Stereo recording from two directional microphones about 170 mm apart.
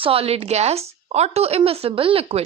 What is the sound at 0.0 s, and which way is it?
A woman's voice, 35° right (ahead or behind).